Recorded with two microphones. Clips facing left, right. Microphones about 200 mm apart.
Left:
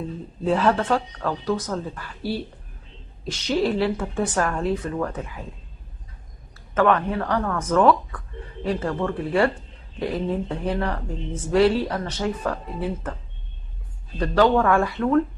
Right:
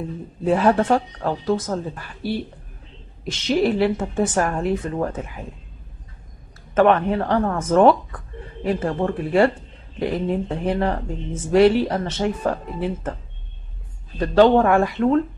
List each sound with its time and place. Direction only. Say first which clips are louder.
0.4 s speech: right 3 dB; 15° right (ahead or behind)
3.4 s speech: right 3 dB; 20° right (ahead or behind)
6.7 s speech: right 4 dB; 20° right (ahead or behind)
14.2 s speech: right 4 dB; 25° right (ahead or behind)